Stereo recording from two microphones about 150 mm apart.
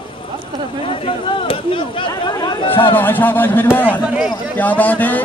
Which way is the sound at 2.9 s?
15° left (ahead or behind).